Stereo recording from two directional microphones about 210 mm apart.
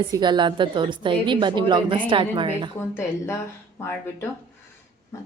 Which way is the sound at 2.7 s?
10° left (ahead or behind).